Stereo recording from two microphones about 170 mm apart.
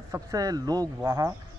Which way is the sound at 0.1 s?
20° right (ahead or behind).